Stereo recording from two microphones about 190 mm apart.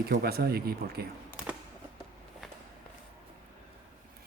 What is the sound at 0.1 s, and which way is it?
Speech, 55° right (ahead or behind).